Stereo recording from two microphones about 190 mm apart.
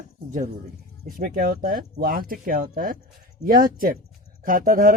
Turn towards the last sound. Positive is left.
turn(degrees=-45)  # may be behind; listen again after turning